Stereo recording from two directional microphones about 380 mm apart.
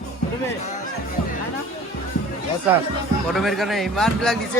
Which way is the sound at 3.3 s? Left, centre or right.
Centre.